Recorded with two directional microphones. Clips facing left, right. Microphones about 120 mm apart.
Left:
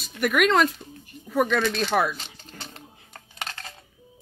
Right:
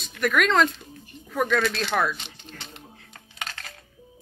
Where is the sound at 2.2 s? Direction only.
40° left (ahead or behind).